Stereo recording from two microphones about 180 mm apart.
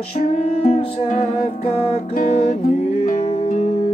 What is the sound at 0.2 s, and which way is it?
Music, 35° left (ahead or behind).